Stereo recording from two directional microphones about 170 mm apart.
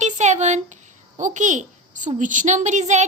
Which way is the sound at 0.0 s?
45° right (ahead or behind).